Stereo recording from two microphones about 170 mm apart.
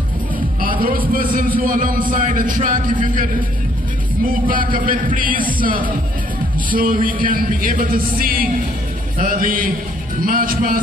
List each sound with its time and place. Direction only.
0.6 s a man's voice: 55° right (ahead or behind)